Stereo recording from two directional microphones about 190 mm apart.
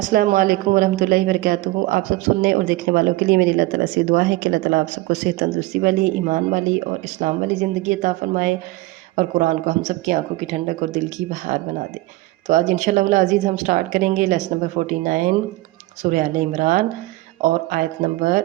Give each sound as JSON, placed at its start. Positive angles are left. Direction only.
{"t": 0.1, "sound": "speech", "side_deg": -45}